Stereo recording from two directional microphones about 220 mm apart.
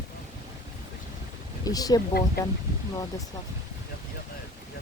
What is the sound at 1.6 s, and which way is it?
Speech, 15° left (ahead or behind).